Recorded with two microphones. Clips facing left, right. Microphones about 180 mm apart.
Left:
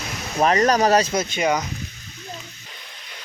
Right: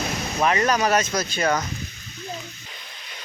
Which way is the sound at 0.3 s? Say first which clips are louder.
Left 4 dB; 35° left (ahead or behind).